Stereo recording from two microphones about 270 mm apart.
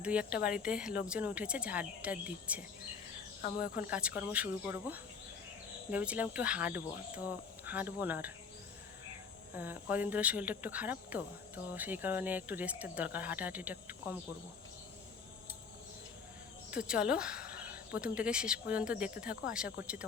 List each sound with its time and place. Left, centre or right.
0.0 s speech: centre
3.4 s speech: left
3.8 s speech: centre
9.6 s speech: centre
16.7 s speech: centre